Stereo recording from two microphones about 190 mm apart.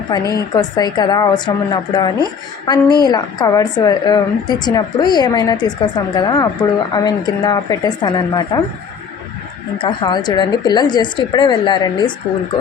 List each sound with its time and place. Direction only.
0.1 s a woman's voice: 20° left (ahead or behind)
9.7 s a woman's voice: 25° left (ahead or behind)